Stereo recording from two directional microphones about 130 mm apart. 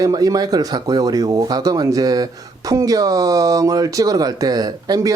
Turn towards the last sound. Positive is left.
turn(degrees=-30)  # may be behind; listen again after turning